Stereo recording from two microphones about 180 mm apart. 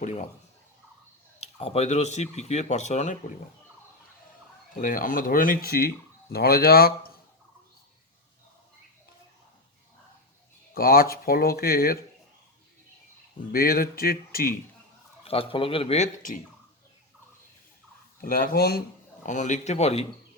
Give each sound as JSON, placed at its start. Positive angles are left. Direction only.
{"t": 0.0, "sound": "speech", "side_deg": 40}
{"t": 1.4, "sound": "speech", "side_deg": 35}
{"t": 4.8, "sound": "speech", "side_deg": 50}
{"t": 10.8, "sound": "speech", "side_deg": 55}
{"t": 13.5, "sound": "speech", "side_deg": 55}
{"t": 15.3, "sound": "speech", "side_deg": 30}
{"t": 18.2, "sound": "speech", "side_deg": 50}
{"t": 19.2, "sound": "speech", "side_deg": 40}